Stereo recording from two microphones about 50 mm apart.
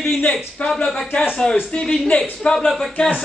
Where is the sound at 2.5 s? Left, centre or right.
Centre.